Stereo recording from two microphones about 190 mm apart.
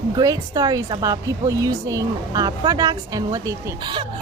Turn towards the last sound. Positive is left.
turn(degrees=-20)  # may be behind; listen again after turning